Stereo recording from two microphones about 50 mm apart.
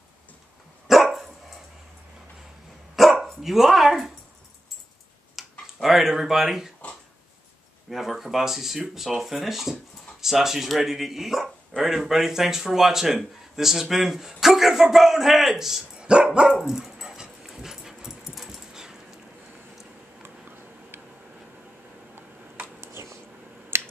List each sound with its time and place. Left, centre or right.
0.8 s dog: centre
3.0 s dog: centre
3.4 s speech: centre
5.3 s speech: centre
7.9 s speech: centre
16.0 s dog: centre
16.5 s dog: centre
20.4 s a sound: right
22.8 s a sound: right